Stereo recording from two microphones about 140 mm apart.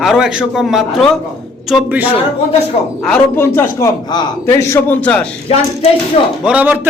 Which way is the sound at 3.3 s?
20° left (ahead or behind).